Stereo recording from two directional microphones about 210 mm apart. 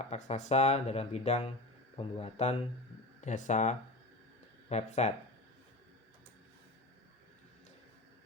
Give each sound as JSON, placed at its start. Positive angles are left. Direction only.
{"t": 0.1, "sound": "speech", "side_deg": 30}